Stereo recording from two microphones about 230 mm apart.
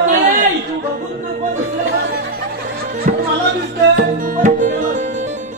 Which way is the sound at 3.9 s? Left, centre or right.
Right.